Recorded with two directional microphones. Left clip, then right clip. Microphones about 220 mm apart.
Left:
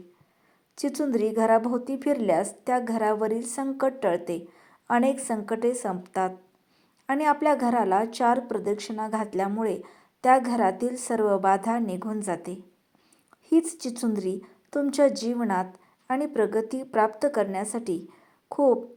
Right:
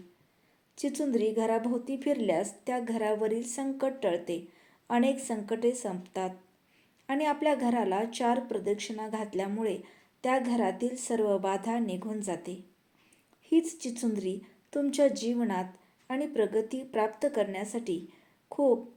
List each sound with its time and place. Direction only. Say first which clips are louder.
0.8 s a woman's voice: left 4 dB; 20° left (ahead or behind)
7.1 s a woman's voice: left 6 dB; 20° left (ahead or behind)